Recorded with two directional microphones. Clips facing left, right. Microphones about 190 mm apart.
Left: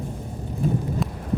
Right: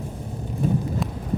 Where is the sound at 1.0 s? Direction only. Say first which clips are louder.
Left 1 dB; centre (ahead or behind).